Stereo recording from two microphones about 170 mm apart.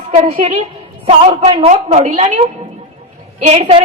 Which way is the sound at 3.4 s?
40° right (ahead or behind).